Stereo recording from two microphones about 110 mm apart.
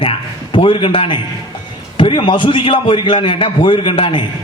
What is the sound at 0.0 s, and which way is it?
A man's voice, 55° left (ahead or behind).